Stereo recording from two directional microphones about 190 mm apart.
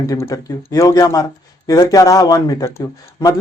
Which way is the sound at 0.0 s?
15° left (ahead or behind).